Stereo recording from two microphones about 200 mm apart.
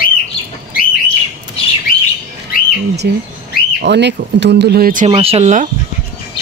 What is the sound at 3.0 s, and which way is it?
Speech, 50° right (ahead or behind).